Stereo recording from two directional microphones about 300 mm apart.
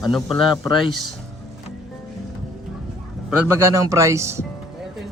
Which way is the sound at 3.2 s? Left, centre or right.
Centre.